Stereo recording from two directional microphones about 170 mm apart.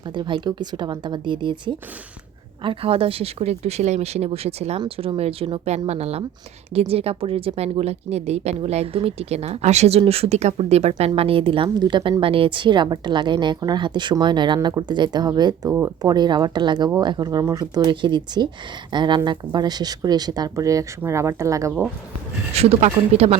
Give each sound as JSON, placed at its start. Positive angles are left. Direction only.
{"t": 0.1, "sound": "a woman's voice", "side_deg": -30}
{"t": 22.5, "sound": "a woman's voice", "side_deg": -40}